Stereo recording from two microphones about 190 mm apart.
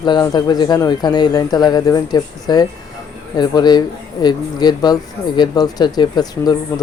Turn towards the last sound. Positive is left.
turn(degrees=20)  # may be behind; listen again after turning